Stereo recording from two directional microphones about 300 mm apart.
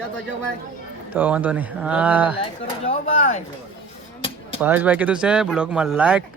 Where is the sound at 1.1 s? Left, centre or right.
Centre.